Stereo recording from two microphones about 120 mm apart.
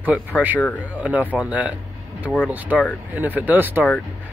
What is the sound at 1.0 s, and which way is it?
Speech, 10° right (ahead or behind).